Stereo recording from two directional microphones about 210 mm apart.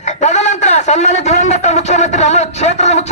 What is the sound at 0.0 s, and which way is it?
A man's voice, 35° left (ahead or behind).